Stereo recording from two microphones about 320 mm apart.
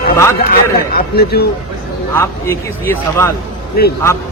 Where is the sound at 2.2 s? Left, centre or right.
Centre.